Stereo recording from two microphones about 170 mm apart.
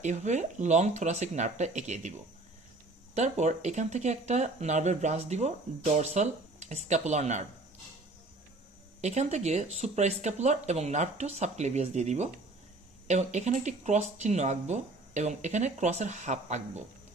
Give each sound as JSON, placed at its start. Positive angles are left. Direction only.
{"t": 0.0, "sound": "speech", "side_deg": -45}
{"t": 3.2, "sound": "speech", "side_deg": -45}
{"t": 9.0, "sound": "speech", "side_deg": -40}